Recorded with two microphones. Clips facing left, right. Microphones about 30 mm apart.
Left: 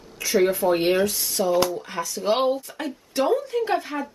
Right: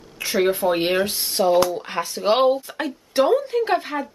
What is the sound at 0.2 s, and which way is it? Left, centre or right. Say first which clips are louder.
Speech: even; right.